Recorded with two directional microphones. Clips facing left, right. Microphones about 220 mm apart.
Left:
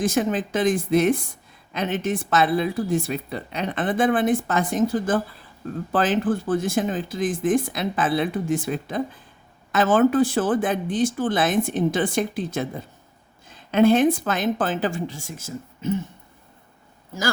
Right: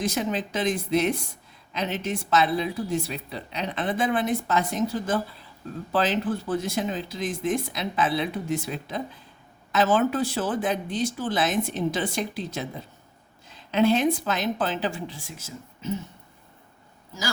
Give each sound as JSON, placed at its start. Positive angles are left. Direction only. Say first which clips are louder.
{"t": 0.0, "sound": "a woman's voice", "louder": "left 5 dB", "side_deg": 50}